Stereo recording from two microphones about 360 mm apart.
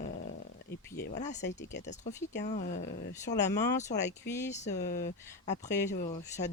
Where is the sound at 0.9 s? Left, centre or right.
Left.